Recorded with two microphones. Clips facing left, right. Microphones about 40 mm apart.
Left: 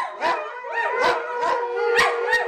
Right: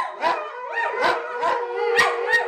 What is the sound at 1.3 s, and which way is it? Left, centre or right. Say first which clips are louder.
Dog: even; right.